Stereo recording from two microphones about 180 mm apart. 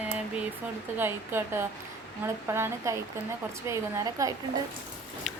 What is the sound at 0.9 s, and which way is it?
A woman's voice, 10° right (ahead or behind).